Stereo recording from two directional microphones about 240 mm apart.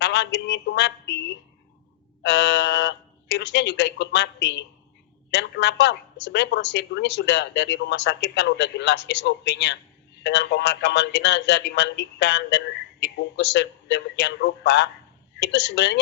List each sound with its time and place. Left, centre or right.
0.0 s speech: left